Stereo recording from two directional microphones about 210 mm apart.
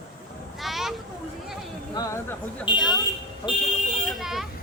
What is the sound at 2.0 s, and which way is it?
Speech, 20° left (ahead or behind).